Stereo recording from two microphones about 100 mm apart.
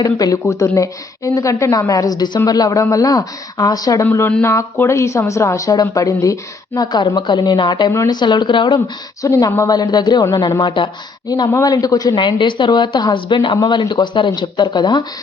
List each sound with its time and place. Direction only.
0.0 s speech: 40° left (ahead or behind)
4.0 s speech: 25° left (ahead or behind)
6.8 s a woman's voice: 45° left (ahead or behind)
9.2 s speech: 30° left (ahead or behind)
9.6 s a woman's voice: 45° left (ahead or behind)
11.3 s speech: 40° left (ahead or behind)
12.1 s a woman's voice: 50° left (ahead or behind)